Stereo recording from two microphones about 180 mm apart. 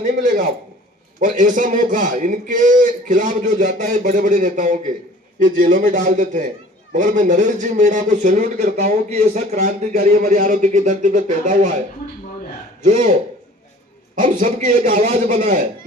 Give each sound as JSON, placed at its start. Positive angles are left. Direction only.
{"t": 0.0, "sound": "a man's voice", "side_deg": -45}
{"t": 12.8, "sound": "a man's voice", "side_deg": -45}
{"t": 14.2, "sound": "a man's voice", "side_deg": -50}